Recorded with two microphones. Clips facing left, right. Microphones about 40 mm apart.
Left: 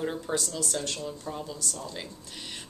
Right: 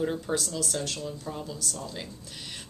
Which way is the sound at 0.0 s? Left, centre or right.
Centre.